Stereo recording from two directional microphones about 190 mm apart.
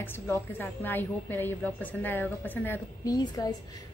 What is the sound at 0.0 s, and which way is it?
A woman's voice, 10° left (ahead or behind).